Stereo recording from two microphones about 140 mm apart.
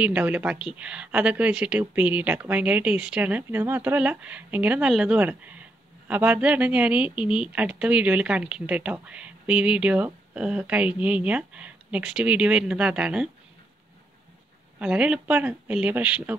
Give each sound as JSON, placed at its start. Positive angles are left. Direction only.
{"t": 0.0, "sound": "speech", "side_deg": -10}
{"t": 14.8, "sound": "speech", "side_deg": -5}